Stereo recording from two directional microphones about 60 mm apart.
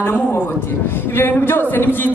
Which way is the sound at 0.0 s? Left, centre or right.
Left.